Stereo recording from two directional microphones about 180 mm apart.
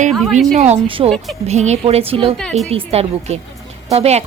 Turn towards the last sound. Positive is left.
turn(degrees=-35)  # may be behind; listen again after turning